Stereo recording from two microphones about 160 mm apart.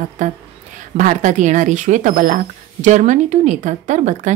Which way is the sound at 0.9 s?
55° right (ahead or behind).